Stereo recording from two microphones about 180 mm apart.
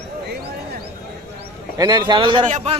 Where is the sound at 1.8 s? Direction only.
20° right (ahead or behind).